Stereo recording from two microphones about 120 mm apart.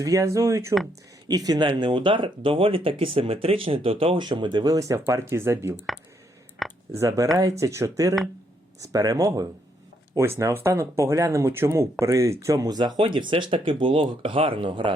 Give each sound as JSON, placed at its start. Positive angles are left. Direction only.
{"t": 0.0, "sound": "speech", "side_deg": -30}
{"t": 5.7, "sound": "speech", "side_deg": -5}
{"t": 6.6, "sound": "a sound", "side_deg": 0}
{"t": 6.9, "sound": "speech", "side_deg": -25}